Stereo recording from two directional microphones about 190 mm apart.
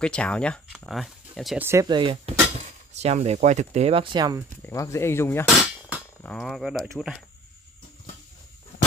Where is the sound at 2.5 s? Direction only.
35° right (ahead or behind).